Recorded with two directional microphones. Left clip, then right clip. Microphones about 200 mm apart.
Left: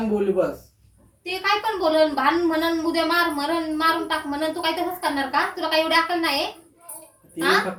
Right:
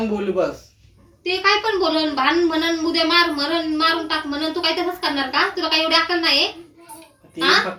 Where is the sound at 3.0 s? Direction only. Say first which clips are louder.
Right 6 dB; 60° left (ahead or behind).